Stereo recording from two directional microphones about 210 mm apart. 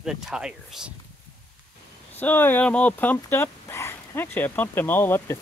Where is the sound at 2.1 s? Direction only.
10° left (ahead or behind).